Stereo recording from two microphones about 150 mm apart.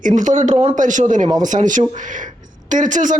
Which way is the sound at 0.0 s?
60° right (ahead or behind).